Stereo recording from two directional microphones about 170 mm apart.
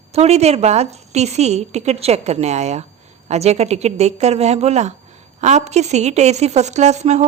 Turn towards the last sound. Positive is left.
turn(degrees=-40)  # may be behind; listen again after turning